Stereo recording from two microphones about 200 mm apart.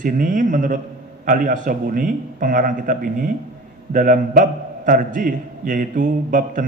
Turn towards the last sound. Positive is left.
turn(degrees=-40)  # may be behind; listen again after turning